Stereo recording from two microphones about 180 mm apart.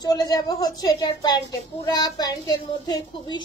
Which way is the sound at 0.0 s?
20° left (ahead or behind).